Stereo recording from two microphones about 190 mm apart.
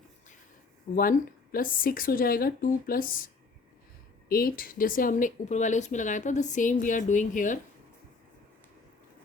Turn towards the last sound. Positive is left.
turn(degrees=40)  # may be behind; listen again after turning